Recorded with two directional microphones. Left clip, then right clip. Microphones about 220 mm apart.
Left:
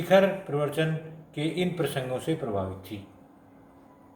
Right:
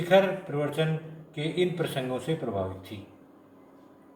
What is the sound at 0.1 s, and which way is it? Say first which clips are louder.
A man's voice: left 1 dB; 40° left (ahead or behind).